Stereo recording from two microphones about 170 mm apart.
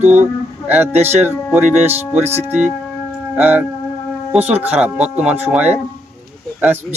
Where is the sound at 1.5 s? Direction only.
10° right (ahead or behind).